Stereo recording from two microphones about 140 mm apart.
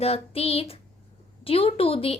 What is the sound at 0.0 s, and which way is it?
A woman's voice, 45° left (ahead or behind).